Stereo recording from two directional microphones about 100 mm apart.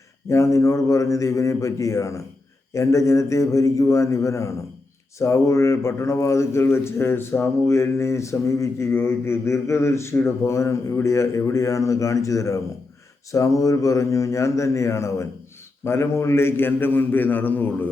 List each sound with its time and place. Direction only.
0.3 s speech: 30° left (ahead or behind)